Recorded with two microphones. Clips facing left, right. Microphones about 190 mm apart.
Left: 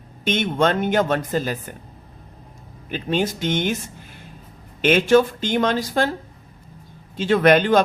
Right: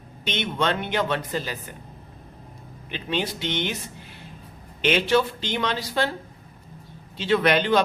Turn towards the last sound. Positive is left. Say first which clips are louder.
# left 5 dB
turn(degrees=50)  # may be behind; listen again after turning